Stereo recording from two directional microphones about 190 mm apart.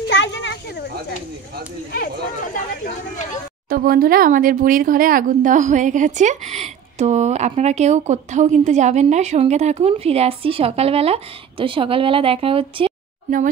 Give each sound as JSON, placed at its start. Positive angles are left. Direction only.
{"t": 0.1, "sound": "a sound", "side_deg": 70}
{"t": 1.9, "sound": "speech", "side_deg": 45}
{"t": 3.6, "sound": "speech", "side_deg": -50}